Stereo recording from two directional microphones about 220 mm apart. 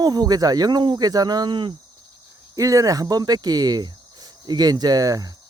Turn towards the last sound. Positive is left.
turn(degrees=-15)  # may be behind; listen again after turning